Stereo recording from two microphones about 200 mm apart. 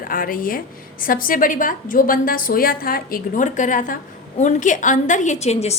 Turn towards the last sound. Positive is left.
turn(degrees=30)  # may be behind; listen again after turning